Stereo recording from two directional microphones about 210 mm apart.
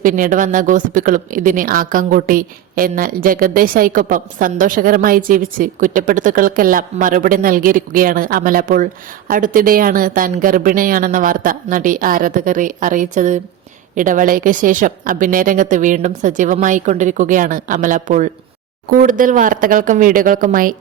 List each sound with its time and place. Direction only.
0.0 s speech: 40° right (ahead or behind)